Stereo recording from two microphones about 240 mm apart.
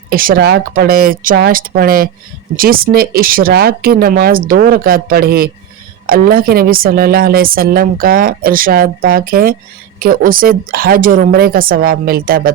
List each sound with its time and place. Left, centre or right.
0.1 s speech: right